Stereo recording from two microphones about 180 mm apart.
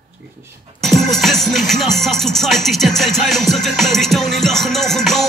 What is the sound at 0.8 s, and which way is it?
Music, centre (ahead or behind).